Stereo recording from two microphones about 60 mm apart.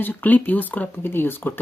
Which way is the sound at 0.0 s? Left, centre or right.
Left.